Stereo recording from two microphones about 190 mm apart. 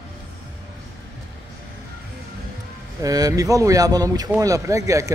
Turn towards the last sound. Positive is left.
turn(degrees=-15)  # may be behind; listen again after turning